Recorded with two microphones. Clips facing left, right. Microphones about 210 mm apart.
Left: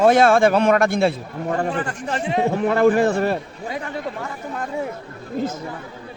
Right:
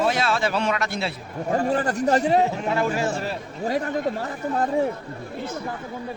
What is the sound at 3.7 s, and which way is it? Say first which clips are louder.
Speech: right 4 dB; 40° right (ahead or behind).